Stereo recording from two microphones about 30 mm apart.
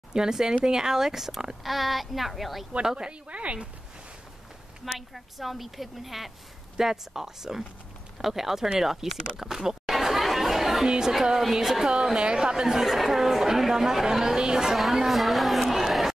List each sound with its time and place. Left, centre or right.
0.1 s a woman's voice: right
1.6 s a woman's voice: centre
2.8 s a woman's voice: right
3.1 s a woman's voice: right
4.9 s a woman's voice: centre
9.7 s chatter: centre
10.9 s a woman's voice: right
11.9 s a woman's voice: right
12.7 s speech: centre
15.0 s chatter: centre